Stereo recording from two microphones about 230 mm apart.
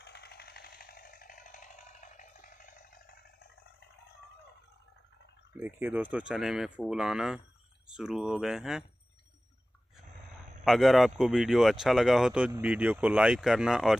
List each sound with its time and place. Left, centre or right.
0.0 s ratchet: left
5.6 s speech: centre
10.6 s speech: centre